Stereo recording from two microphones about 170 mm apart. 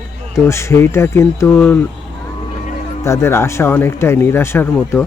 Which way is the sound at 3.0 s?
15° left (ahead or behind).